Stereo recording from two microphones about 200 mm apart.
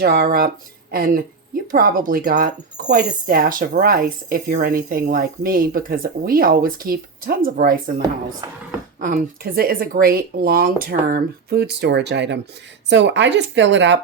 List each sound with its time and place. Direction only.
0.0 s speech: 50° right (ahead or behind)